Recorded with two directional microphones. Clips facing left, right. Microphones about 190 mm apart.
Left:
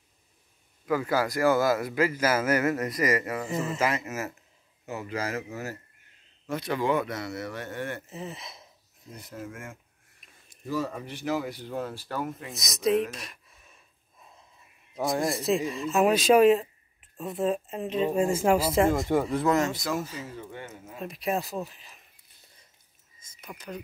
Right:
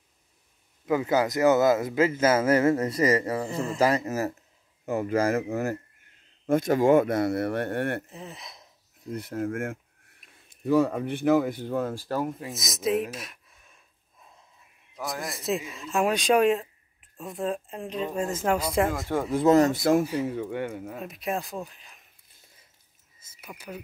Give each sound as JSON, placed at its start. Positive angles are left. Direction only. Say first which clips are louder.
{"t": 0.8, "sound": "a man's voice", "louder": "right 3 dB", "side_deg": -20}
{"t": 4.8, "sound": "speech", "louder": "right 8 dB", "side_deg": -50}
{"t": 8.1, "sound": "speech", "louder": "left 3 dB", "side_deg": 0}
{"t": 9.1, "sound": "speech", "louder": "right 10 dB", "side_deg": -65}
{"t": 10.2, "sound": "a sound", "louder": "right 1 dB", "side_deg": 0}
{"t": 10.6, "sound": "speech", "louder": "right 9 dB", "side_deg": -60}
{"t": 12.4, "sound": "speech", "louder": "left 1 dB", "side_deg": 0}
{"t": 15.0, "sound": "a man's voice", "louder": "left 7 dB", "side_deg": 25}
{"t": 15.3, "sound": "speech", "louder": "left 4 dB", "side_deg": 0}
{"t": 19.4, "sound": "speech", "louder": "right 11 dB", "side_deg": -30}
{"t": 19.7, "sound": "speech", "louder": "right 9 dB", "side_deg": -50}
{"t": 20.2, "sound": "speech", "louder": "right 10 dB", "side_deg": -65}
{"t": 21.0, "sound": "speech", "louder": "left 3 dB", "side_deg": 0}
{"t": 23.1, "sound": "a sound", "louder": "even", "side_deg": -5}